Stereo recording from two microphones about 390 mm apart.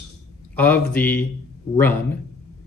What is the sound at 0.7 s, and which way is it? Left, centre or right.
Speech, centre.